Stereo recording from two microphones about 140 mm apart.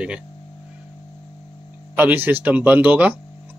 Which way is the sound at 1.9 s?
15° right (ahead or behind).